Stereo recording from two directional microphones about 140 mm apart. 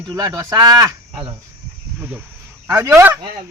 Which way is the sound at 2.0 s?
10° right (ahead or behind).